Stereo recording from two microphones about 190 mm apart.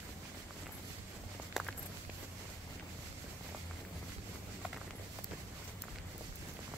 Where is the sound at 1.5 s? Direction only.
Centre (ahead or behind).